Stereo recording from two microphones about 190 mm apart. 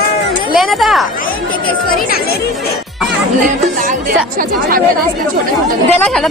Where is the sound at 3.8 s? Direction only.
45° right (ahead or behind).